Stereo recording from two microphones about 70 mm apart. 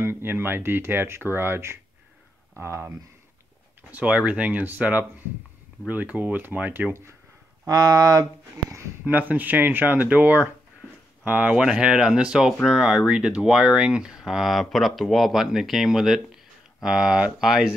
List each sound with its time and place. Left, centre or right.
0.0 s speech: right
3.9 s speech: centre
7.6 s speech: right
9.0 s speech: right
11.5 s speech: centre